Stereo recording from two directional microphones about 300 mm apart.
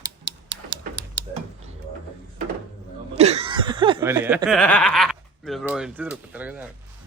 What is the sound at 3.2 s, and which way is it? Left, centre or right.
Speech, right.